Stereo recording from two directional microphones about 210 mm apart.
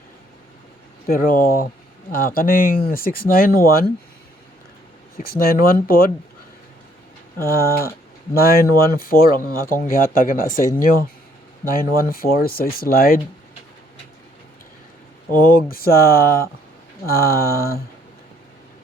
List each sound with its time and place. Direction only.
1.0 s speech: 45° left (ahead or behind)
5.1 s speech: 45° left (ahead or behind)
7.4 s speech: 45° left (ahead or behind)
15.3 s speech: 45° left (ahead or behind)